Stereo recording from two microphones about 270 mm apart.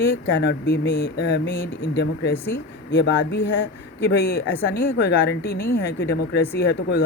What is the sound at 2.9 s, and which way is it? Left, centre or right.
Speech, left.